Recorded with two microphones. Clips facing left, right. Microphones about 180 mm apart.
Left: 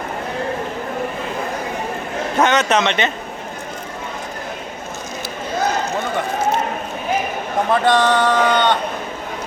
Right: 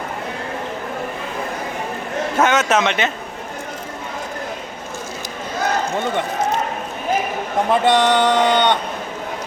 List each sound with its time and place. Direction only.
2.4 s a man's voice: 5° right (ahead or behind)
7.7 s speech: 20° right (ahead or behind)